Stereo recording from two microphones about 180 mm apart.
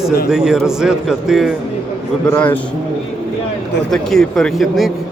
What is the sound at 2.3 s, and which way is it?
Speech, 10° left (ahead or behind).